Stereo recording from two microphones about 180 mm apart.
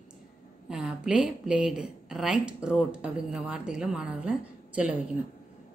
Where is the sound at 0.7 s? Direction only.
5° right (ahead or behind).